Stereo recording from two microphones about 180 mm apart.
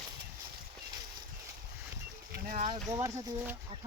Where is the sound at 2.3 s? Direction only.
45° right (ahead or behind).